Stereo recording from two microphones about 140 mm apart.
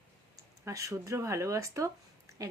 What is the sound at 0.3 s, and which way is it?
Speech, 20° right (ahead or behind).